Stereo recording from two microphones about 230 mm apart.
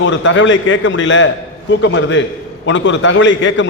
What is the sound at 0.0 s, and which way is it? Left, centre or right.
A man's voice, left.